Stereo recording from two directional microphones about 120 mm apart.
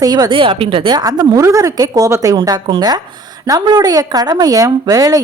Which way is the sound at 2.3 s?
40° right (ahead or behind).